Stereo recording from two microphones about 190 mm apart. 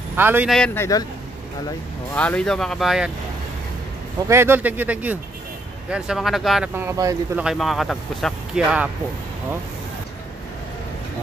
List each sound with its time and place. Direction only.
0.1 s speech: 10° right (ahead or behind)
0.7 s speech: 20° left (ahead or behind)
2.1 s speech: 5° left (ahead or behind)
4.3 s speech: 10° right (ahead or behind)
6.7 s speech: 10° right (ahead or behind)
7.4 s speech: centre (ahead or behind)